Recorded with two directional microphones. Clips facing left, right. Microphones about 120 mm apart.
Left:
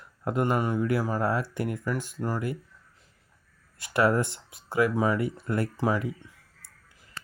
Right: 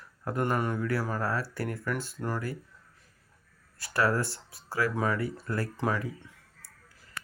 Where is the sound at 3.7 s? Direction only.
20° left (ahead or behind).